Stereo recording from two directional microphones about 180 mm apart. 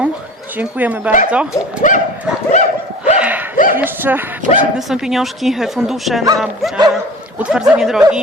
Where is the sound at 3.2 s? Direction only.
10° right (ahead or behind).